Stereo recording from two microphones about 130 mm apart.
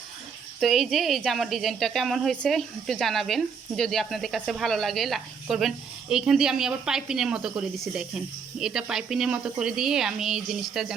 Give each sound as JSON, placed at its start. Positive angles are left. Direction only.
{"t": 0.6, "sound": "a woman's voice", "side_deg": 0}